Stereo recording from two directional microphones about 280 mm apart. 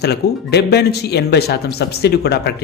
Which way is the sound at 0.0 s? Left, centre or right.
Left.